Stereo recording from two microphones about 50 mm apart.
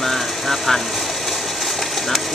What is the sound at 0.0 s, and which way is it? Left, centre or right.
Vehicle, centre.